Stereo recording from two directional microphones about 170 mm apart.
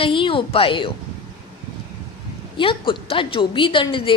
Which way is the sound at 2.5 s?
30° left (ahead or behind).